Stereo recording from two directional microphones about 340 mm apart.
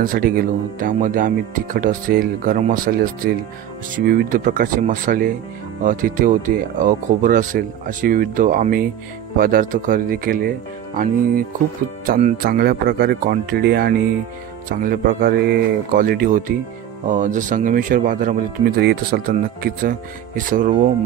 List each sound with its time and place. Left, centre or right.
0.0 s speech: right
12.1 s speech: right